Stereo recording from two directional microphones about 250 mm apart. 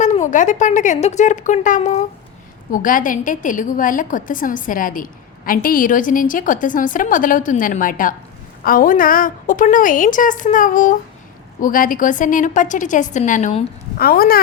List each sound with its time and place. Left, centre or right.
0.0 s a woman's voice: left